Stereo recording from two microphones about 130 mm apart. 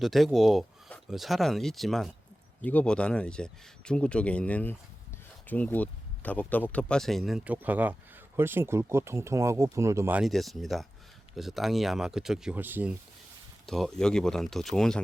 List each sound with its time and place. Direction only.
0.0 s speech: centre (ahead or behind)
7.4 s speech: 10° right (ahead or behind)
10.2 s speech: centre (ahead or behind)
13.7 s speech: centre (ahead or behind)